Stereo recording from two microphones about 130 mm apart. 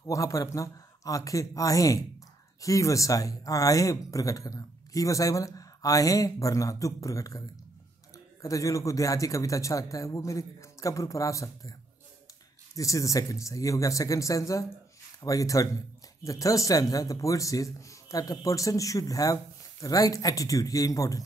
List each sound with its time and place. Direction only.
0.0 s speech: 25° left (ahead or behind)
12.7 s speech: 25° left (ahead or behind)